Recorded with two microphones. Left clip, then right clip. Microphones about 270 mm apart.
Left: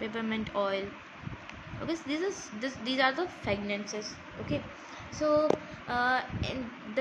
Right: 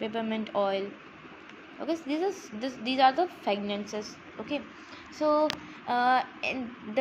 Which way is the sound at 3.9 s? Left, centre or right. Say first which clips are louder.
Right 1 dB; right.